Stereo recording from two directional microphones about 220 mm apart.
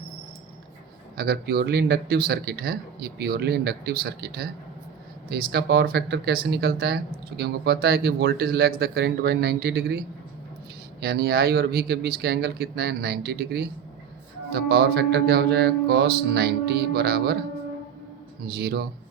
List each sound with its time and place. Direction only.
1.1 s speech: 45° right (ahead or behind)
11.0 s speech: 45° right (ahead or behind)
18.5 s speech: 45° right (ahead or behind)